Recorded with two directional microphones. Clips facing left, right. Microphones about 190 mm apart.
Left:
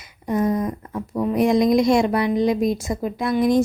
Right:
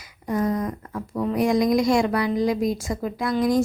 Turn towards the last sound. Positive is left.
turn(degrees=25)  # may be behind; listen again after turning